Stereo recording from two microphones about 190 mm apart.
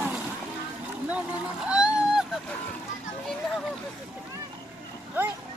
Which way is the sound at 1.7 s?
5° right (ahead or behind).